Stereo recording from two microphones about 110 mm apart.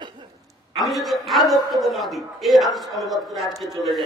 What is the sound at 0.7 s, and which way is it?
A man's voice, centre (ahead or behind).